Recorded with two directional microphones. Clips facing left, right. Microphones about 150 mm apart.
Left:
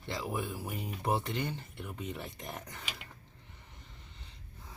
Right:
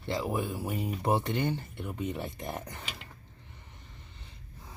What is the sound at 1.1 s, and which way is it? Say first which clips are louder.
Speech: right 5 dB; 55° right (ahead or behind).